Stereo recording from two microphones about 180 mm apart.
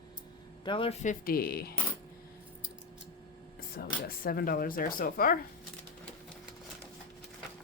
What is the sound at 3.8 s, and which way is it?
Speech, 55° left (ahead or behind).